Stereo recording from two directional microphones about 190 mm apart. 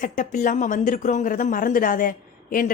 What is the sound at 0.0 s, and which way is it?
A woman's voice, 40° left (ahead or behind).